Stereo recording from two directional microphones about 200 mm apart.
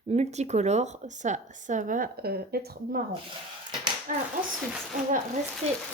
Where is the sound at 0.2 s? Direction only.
35° right (ahead or behind); by 3.0 s 50° right (ahead or behind).